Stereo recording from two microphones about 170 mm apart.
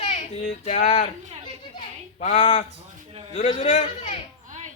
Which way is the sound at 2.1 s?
40° left (ahead or behind).